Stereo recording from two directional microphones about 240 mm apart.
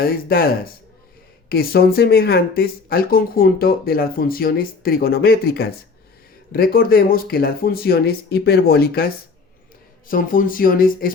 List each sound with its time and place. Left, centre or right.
0.0 s speech: left